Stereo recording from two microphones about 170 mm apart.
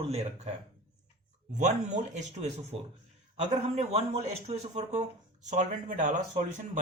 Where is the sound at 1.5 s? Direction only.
45° right (ahead or behind).